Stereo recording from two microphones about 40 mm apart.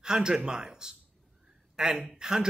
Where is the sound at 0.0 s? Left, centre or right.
Centre.